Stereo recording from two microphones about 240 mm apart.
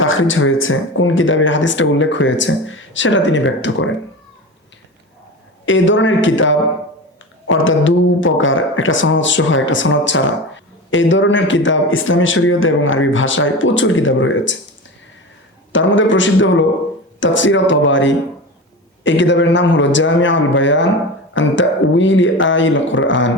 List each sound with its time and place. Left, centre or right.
0.0 s speech: left
5.6 s speech: left
15.7 s speech: left